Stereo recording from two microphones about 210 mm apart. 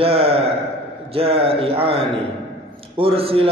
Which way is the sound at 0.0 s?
25° right (ahead or behind).